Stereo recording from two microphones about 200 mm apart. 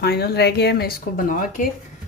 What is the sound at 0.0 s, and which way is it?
Speech, 55° left (ahead or behind).